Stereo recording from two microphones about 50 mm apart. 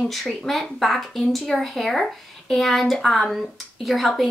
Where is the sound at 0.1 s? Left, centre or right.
Centre.